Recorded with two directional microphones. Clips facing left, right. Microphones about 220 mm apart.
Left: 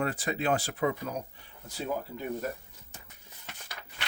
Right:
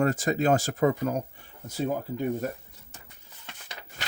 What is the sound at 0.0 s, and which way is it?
Speech, 45° right (ahead or behind).